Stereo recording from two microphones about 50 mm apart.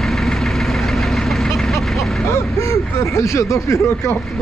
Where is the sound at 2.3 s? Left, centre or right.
Left.